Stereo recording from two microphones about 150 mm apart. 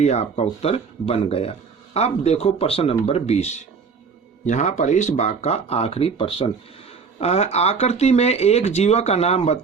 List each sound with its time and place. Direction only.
0.0 s speech: 50° left (ahead or behind)